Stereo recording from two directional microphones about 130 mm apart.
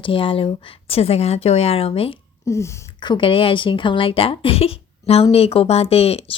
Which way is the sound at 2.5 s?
20° left (ahead or behind).